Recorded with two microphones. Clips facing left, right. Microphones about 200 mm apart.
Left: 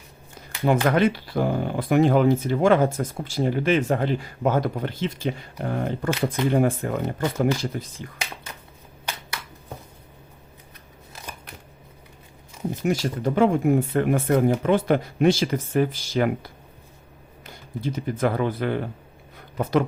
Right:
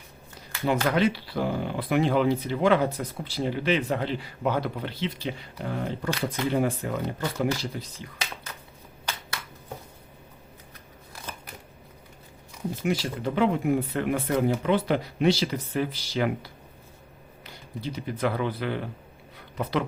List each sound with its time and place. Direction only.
0.6 s speech: 50° left (ahead or behind)
12.8 s speech: 45° left (ahead or behind)